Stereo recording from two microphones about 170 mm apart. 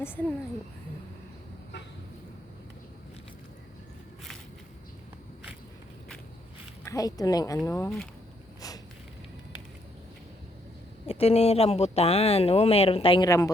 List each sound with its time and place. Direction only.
6.8 s speech: 20° left (ahead or behind)
11.0 s speech: 35° left (ahead or behind)
13.2 s speech: 20° left (ahead or behind)